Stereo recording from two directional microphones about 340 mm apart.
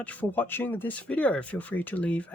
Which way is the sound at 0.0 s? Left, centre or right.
Centre.